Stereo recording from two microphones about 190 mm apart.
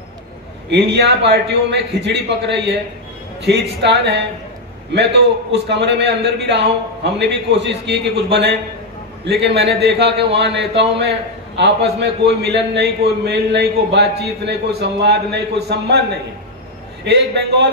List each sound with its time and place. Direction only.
0.7 s a man's voice: 65° right (ahead or behind)
3.8 s a man's voice: 60° right (ahead or behind)
17.0 s a man's voice: 60° right (ahead or behind)